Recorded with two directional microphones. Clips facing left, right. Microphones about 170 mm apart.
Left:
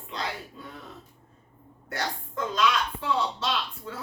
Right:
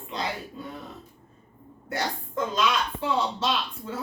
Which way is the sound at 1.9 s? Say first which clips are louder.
Right 2 dB; 20° right (ahead or behind).